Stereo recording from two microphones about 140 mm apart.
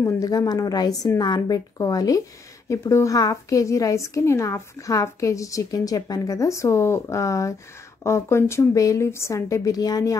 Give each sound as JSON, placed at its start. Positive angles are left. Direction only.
{"t": 0.0, "sound": "a woman's voice", "side_deg": 25}